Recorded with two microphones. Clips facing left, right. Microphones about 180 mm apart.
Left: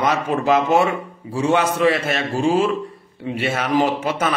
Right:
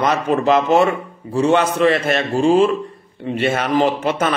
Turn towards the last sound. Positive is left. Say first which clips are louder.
# right 2 dB
turn(degrees=5)  # may be behind; listen again after turning